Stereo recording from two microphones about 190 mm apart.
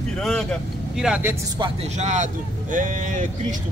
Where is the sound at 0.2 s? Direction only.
5° left (ahead or behind).